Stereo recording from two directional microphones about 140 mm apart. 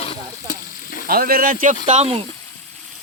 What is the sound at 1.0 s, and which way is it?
Speech, 90° right.